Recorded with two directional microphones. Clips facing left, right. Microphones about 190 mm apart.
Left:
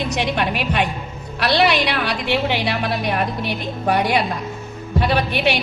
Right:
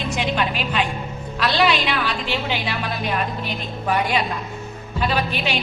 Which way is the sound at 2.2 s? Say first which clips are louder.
Left 5 dB; 65° left (ahead or behind).